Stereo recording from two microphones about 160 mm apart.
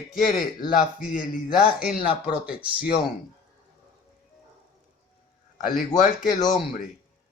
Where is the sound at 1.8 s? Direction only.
5° right (ahead or behind).